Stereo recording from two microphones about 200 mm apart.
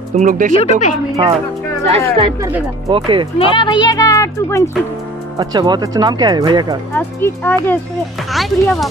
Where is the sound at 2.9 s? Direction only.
25° right (ahead or behind).